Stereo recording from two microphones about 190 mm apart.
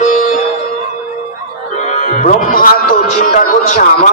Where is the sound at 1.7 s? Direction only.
45° left (ahead or behind).